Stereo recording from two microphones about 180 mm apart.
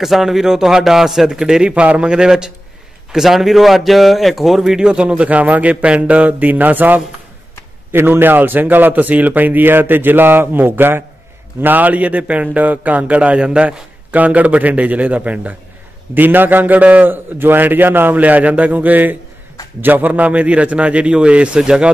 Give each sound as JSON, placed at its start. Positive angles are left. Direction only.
{"t": 0.0, "sound": "a man's voice", "side_deg": 0}